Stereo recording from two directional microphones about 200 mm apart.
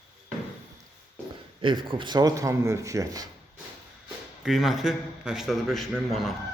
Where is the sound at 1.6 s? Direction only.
25° right (ahead or behind).